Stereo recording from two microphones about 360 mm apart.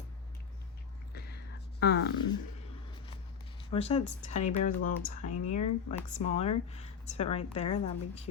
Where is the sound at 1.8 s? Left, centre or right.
Left.